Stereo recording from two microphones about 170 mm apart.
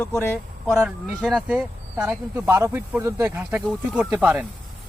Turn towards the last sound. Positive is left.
turn(degrees=-10)  # may be behind; listen again after turning